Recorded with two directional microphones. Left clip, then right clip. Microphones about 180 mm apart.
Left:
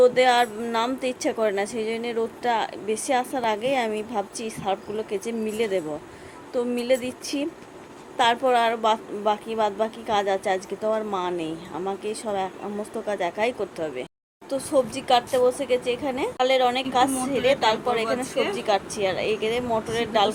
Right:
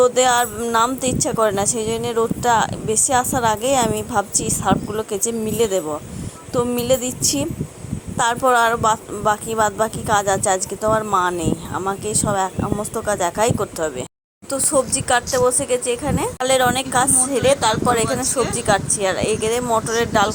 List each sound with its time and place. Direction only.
0.0 s a woman's voice: 25° right (ahead or behind)